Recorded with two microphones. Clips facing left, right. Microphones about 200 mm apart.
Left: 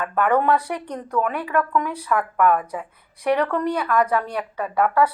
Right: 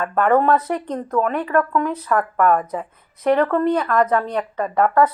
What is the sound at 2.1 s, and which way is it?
Speech, 40° right (ahead or behind).